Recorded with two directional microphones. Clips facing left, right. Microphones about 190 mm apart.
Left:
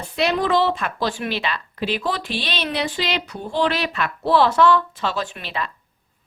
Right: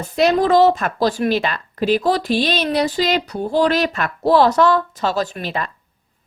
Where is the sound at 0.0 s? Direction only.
40° right (ahead or behind).